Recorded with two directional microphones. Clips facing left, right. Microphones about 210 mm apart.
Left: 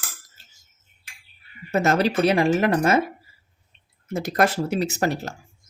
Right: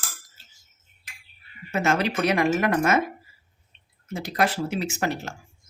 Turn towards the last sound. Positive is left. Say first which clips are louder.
# left 3 dB
turn(degrees=40)  # may be behind; listen again after turning